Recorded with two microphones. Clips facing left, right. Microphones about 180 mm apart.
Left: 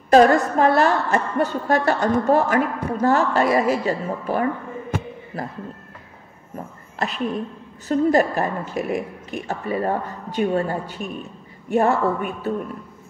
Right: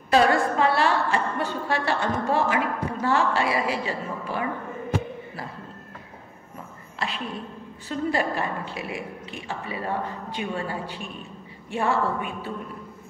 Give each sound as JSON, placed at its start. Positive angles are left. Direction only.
{"t": 0.1, "sound": "a woman's voice", "side_deg": 45}
{"t": 7.0, "sound": "a woman's voice", "side_deg": 45}